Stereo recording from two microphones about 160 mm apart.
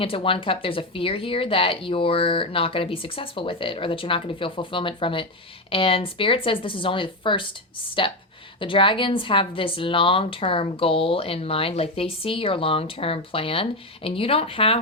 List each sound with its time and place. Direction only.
0.0 s a woman's voice: 35° left (ahead or behind)